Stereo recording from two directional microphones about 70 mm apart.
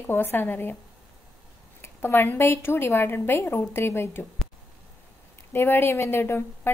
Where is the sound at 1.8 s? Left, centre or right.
Left.